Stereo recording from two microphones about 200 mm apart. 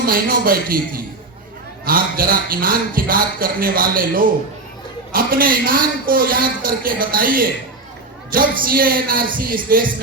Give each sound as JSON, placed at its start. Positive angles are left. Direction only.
{"t": 0.0, "sound": "speech", "side_deg": -45}
{"t": 8.6, "sound": "speech", "side_deg": -45}